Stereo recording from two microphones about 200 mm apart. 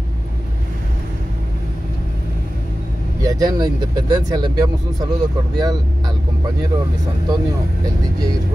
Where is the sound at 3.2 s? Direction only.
20° right (ahead or behind).